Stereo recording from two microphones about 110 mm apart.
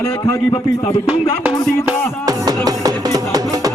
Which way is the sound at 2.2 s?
35° right (ahead or behind).